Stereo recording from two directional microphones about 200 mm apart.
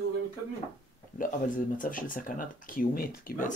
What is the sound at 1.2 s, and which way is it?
Speech, 40° left (ahead or behind).